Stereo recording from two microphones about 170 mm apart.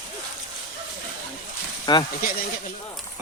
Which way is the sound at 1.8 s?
25° left (ahead or behind).